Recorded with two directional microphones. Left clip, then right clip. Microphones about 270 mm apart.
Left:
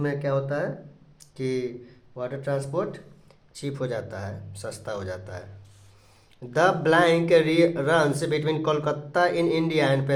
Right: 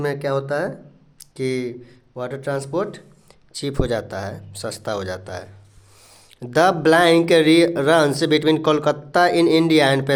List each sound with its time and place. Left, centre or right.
0.0 s speech: right